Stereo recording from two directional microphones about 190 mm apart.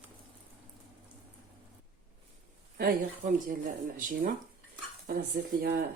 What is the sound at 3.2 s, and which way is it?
Speech, 45° right (ahead or behind).